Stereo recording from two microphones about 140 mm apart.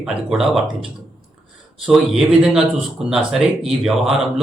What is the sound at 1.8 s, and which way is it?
Speech, 5° right (ahead or behind).